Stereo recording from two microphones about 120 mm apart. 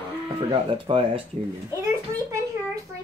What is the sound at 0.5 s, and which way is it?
Speech, 50° right (ahead or behind).